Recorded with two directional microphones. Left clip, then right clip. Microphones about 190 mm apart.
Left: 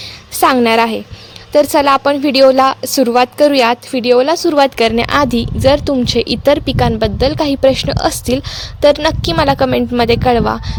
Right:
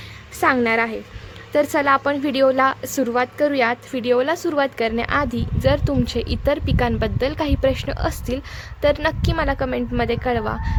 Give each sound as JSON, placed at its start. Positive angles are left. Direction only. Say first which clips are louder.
{"t": 0.3, "sound": "a woman's voice", "louder": "left 8 dB", "side_deg": 45}